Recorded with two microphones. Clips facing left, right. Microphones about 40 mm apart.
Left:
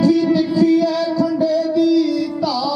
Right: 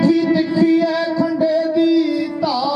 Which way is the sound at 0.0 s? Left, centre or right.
Centre.